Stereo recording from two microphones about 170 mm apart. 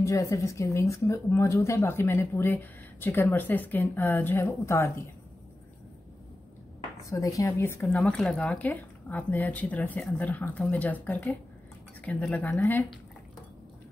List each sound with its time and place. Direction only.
0.0 s a woman's voice: 20° left (ahead or behind)
7.1 s a woman's voice: 20° left (ahead or behind)